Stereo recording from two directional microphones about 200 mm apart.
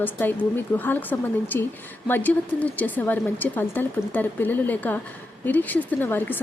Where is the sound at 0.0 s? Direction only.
10° left (ahead or behind).